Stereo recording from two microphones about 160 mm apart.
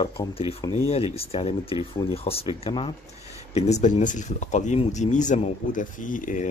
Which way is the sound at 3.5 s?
45° left (ahead or behind).